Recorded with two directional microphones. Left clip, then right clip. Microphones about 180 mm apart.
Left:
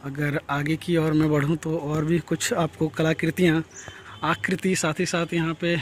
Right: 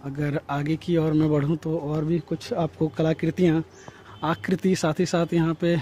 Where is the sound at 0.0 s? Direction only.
10° right (ahead or behind); by 2.6 s 10° left (ahead or behind).